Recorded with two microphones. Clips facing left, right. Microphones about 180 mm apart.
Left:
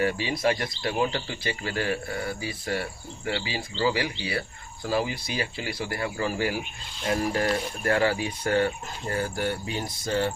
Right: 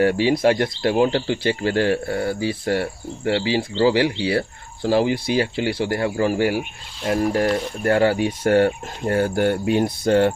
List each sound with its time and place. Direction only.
0.0 s speech: 60° right (ahead or behind)
5.9 s speech: 40° right (ahead or behind)
7.9 s speech: 35° right (ahead or behind)
8.3 s speech: 55° right (ahead or behind)